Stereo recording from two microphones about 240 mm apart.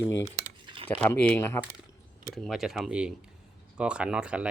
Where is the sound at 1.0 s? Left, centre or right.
Centre.